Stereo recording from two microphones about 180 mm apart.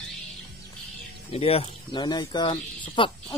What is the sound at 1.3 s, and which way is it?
Speech, 35° left (ahead or behind).